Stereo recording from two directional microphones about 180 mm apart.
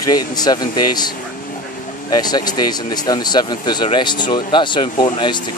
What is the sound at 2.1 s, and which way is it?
Speech, 20° left (ahead or behind).